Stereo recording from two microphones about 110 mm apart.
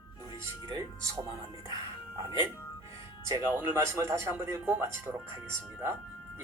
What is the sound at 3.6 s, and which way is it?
A man's voice, 25° right (ahead or behind).